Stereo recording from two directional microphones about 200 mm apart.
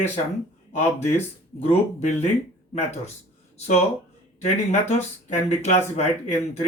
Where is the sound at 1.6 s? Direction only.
30° left (ahead or behind).